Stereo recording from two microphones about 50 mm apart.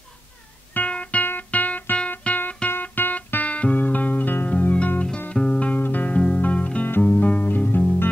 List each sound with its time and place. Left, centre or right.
0.7 s music: left
6.1 s music: left